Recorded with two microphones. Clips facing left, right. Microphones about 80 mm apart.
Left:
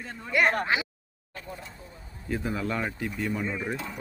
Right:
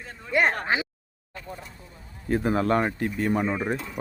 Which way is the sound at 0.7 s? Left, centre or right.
Right.